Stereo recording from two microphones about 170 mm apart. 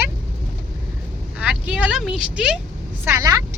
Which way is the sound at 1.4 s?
5° right (ahead or behind).